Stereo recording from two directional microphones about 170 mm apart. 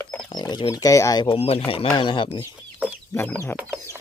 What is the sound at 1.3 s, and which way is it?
Speech, 35° left (ahead or behind).